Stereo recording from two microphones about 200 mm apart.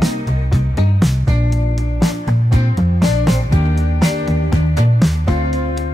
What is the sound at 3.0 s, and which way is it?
Music, centre (ahead or behind).